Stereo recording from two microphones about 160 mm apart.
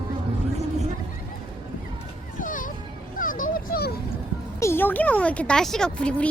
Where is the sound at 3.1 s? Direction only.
60° left (ahead or behind).